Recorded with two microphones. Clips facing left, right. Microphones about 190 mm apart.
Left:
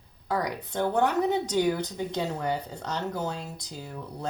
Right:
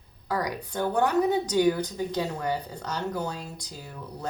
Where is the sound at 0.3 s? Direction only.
25° left (ahead or behind).